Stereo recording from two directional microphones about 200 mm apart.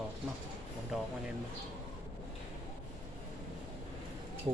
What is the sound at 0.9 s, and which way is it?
Speech, centre (ahead or behind).